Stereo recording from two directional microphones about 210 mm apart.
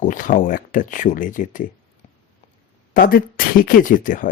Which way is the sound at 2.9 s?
45° left (ahead or behind).